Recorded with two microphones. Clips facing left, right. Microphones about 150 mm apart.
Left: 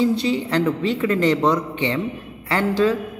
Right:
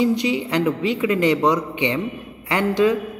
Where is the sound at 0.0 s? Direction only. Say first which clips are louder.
Even; 15° right (ahead or behind).